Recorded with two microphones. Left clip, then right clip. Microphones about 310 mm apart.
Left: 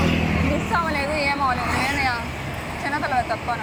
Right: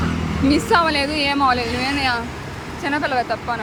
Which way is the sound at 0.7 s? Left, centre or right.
Right.